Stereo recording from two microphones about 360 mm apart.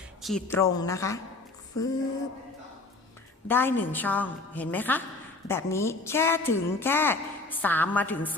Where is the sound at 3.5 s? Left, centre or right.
Centre.